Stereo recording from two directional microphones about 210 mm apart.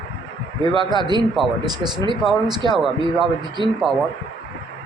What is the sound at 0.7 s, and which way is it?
Speech, 20° right (ahead or behind).